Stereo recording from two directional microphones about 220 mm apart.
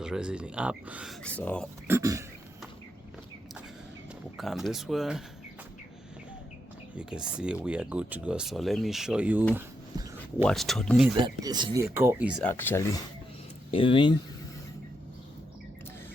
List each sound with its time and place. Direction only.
0.0 s speech: 5° right (ahead or behind)
1.2 s speech: 5° left (ahead or behind)
1.9 s speech: 15° right (ahead or behind)
4.4 s speech: centre (ahead or behind)
6.9 s speech: 5° right (ahead or behind)
11.1 s speech: 20° right (ahead or behind)
12.4 s speech: 10° left (ahead or behind)
13.7 s speech: 25° left (ahead or behind)